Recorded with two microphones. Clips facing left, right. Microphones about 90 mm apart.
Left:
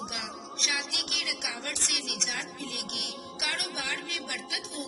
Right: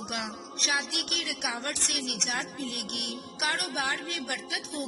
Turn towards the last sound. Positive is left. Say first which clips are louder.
# right 3 dB
turn(degrees=-40)  # may be behind; listen again after turning